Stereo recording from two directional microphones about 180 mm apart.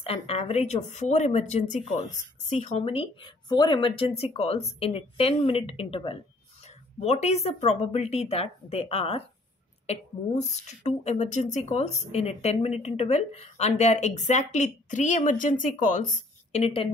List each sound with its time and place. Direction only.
0.0 s a woman's voice: 35° left (ahead or behind)
16.5 s a woman's voice: 30° left (ahead or behind)